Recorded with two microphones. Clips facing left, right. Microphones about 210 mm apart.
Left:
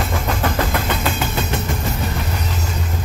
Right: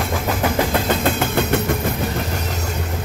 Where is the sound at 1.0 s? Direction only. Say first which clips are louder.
Right 3 dB; 55° right (ahead or behind).